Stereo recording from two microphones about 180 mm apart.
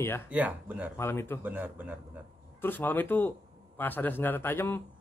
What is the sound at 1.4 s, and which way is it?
Speech, 10° right (ahead or behind).